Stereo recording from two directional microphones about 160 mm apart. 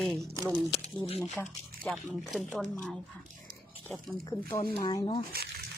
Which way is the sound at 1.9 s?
Centre (ahead or behind).